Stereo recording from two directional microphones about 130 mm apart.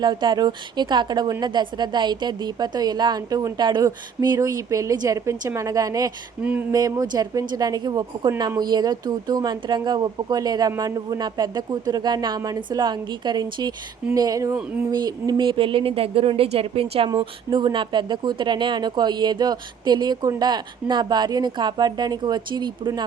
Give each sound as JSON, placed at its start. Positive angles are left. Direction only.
{"t": 0.0, "sound": "a woman's voice", "side_deg": -35}
{"t": 6.4, "sound": "a sound", "side_deg": -10}
{"t": 6.7, "sound": "a woman's voice", "side_deg": -30}
{"t": 17.1, "sound": "speech", "side_deg": -35}